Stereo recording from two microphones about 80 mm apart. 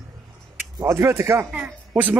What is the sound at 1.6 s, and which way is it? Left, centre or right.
Speech, centre.